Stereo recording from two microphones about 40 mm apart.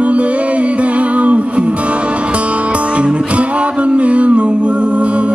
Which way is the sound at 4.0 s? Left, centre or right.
Right.